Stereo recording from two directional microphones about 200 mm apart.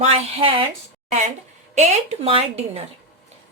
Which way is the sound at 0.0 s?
30° right (ahead or behind).